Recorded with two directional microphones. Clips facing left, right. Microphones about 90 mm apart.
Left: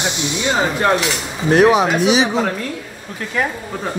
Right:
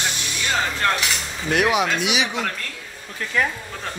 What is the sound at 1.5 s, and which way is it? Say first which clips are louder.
Speech: left 7 dB; 35° left (ahead or behind).